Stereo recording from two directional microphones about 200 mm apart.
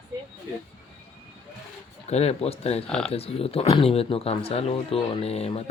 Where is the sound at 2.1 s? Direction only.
30° left (ahead or behind).